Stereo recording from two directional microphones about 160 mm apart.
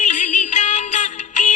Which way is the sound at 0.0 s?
50° left (ahead or behind).